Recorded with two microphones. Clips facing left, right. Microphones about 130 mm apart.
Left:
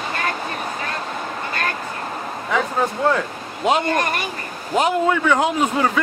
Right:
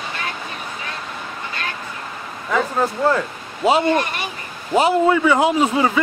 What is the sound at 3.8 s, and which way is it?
Speech, 50° left (ahead or behind).